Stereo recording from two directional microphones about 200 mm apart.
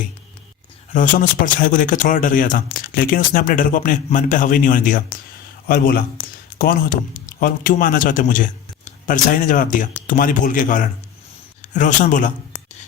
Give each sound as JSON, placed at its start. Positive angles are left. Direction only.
{"t": 0.9, "sound": "speech", "side_deg": 40}